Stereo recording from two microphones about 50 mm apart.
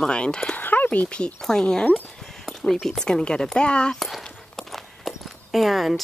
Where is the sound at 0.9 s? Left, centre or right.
Left.